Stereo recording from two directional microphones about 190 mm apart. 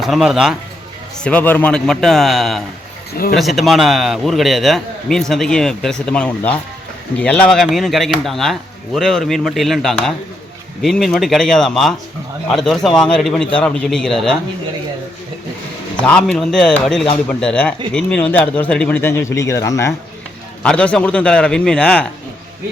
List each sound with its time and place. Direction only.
0.0 s a man's voice: centre (ahead or behind)
1.2 s a man's voice: 10° left (ahead or behind)
3.1 s speech: 50° left (ahead or behind)
3.3 s a man's voice: centre (ahead or behind)
16.0 s a man's voice: 5° left (ahead or behind)